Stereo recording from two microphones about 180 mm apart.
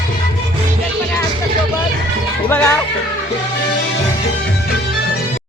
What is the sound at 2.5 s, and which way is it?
Music, 10° left (ahead or behind).